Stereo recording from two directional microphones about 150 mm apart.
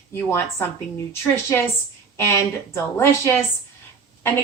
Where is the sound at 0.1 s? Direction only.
15° left (ahead or behind).